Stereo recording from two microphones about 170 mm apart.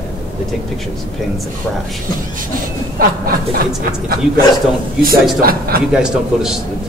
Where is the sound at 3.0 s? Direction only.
60° right (ahead or behind).